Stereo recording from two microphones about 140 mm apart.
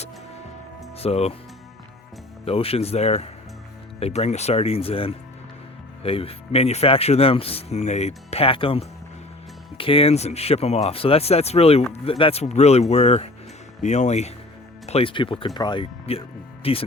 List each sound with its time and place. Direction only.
0.9 s speech: 45° left (ahead or behind)
2.4 s speech: 45° left (ahead or behind)